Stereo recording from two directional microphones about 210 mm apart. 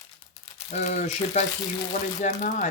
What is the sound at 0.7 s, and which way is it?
Speech, 35° left (ahead or behind).